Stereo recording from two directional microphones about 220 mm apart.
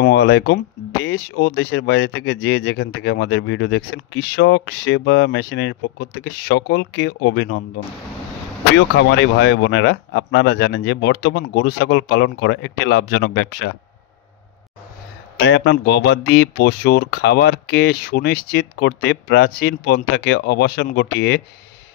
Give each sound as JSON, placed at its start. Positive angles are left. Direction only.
{"t": 0.0, "sound": "speech", "side_deg": 50}
{"t": 8.9, "sound": "speech", "side_deg": 55}
{"t": 15.3, "sound": "speech", "side_deg": 50}